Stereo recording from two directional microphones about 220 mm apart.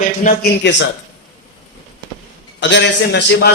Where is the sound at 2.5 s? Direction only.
55° left (ahead or behind).